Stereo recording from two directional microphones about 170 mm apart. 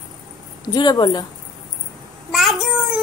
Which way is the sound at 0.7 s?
25° left (ahead or behind).